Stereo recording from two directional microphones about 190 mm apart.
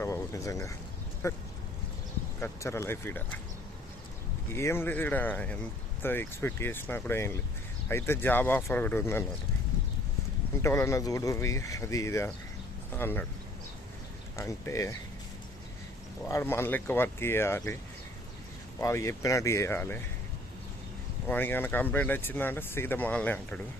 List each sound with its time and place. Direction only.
0.0 s a sound: 15° left (ahead or behind)
1.2 s speech: 15° left (ahead or behind)
2.4 s speech: 15° left (ahead or behind)
4.5 s speech: 10° left (ahead or behind)
10.6 s speech: 15° left (ahead or behind)
14.3 s speech: 15° left (ahead or behind)
16.2 s speech: 10° left (ahead or behind)
18.8 s speech: 15° left (ahead or behind)
21.2 s speech: 10° left (ahead or behind)